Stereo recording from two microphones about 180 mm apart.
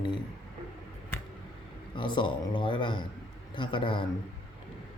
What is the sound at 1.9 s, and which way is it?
Speech, 25° left (ahead or behind).